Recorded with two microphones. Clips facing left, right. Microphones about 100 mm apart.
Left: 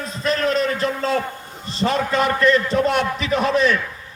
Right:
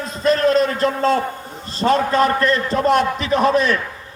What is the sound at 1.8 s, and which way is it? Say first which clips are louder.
A man's voice: right 4 dB; 35° right (ahead or behind).